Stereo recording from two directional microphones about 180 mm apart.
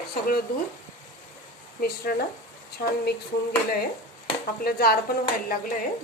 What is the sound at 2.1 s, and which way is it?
Speech, 55° left (ahead or behind).